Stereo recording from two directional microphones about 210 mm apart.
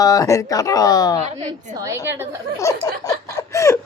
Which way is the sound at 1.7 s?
15° right (ahead or behind).